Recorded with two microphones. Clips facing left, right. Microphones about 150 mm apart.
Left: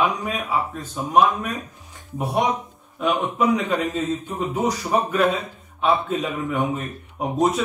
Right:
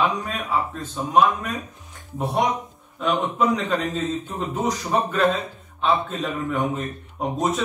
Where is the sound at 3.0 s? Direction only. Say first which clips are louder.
Left 1 dB; 10° left (ahead or behind).